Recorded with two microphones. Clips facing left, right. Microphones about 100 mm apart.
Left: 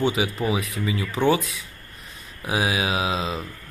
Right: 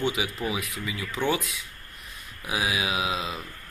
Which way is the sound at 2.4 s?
30° left (ahead or behind).